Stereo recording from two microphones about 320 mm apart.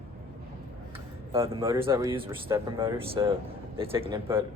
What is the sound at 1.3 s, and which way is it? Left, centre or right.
A man's voice, centre.